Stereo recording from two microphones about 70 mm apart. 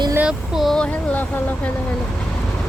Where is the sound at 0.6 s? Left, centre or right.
Centre.